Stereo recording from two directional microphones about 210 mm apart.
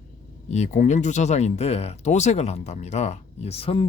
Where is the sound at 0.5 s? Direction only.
35° left (ahead or behind).